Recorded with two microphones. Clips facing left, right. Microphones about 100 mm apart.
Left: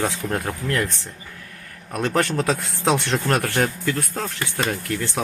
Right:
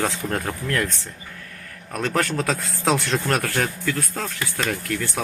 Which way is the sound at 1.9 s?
25° left (ahead or behind).